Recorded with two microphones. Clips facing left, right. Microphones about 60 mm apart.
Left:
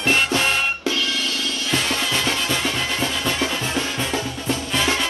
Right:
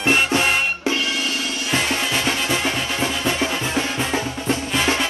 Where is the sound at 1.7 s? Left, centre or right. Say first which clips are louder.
Right 1 dB; right.